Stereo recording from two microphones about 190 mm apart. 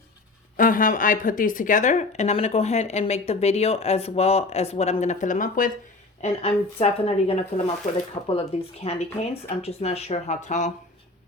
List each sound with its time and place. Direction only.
0.5 s speech: 45° left (ahead or behind)
6.2 s speech: 30° left (ahead or behind)